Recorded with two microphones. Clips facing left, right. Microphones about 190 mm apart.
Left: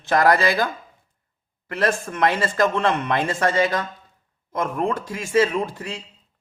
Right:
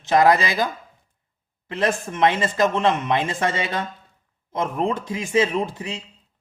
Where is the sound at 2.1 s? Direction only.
20° right (ahead or behind).